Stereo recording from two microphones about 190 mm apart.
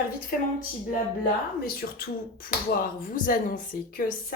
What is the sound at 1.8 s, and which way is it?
Speech, 55° left (ahead or behind).